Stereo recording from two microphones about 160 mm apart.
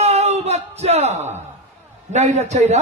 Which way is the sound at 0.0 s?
45° right (ahead or behind).